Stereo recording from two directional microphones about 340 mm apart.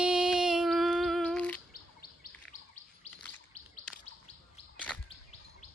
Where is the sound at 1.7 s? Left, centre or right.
Left.